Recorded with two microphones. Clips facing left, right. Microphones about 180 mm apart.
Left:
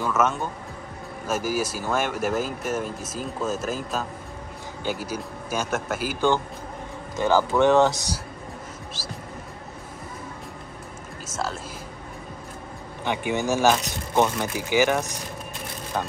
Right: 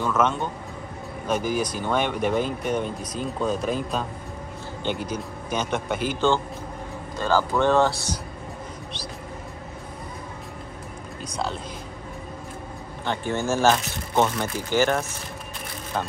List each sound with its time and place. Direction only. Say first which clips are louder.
0.0 s speech: right 1 dB; 5° left (ahead or behind)
8.9 s a sound: right 2 dB; 5° left (ahead or behind)
13.0 s speech: left 1 dB; 15° left (ahead or behind)